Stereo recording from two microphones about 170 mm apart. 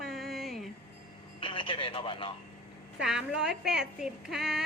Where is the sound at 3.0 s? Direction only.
5° right (ahead or behind).